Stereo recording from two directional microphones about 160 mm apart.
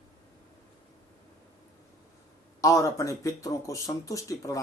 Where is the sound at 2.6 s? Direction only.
20° left (ahead or behind).